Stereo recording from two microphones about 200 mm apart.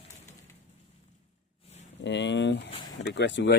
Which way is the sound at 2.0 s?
60° left (ahead or behind).